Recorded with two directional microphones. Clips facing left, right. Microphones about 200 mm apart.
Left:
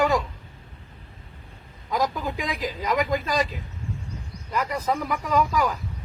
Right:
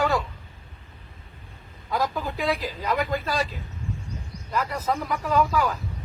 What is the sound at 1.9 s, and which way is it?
Speech, 10° left (ahead or behind).